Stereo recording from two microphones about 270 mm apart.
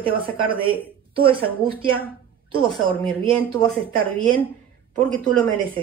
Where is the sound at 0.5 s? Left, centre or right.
Centre.